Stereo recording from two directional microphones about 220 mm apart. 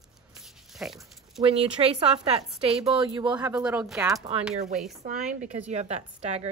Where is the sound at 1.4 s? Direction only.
25° right (ahead or behind).